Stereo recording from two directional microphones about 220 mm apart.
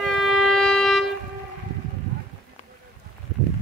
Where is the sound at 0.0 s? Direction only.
Centre (ahead or behind).